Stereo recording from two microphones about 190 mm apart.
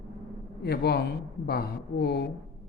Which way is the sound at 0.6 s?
60° left (ahead or behind).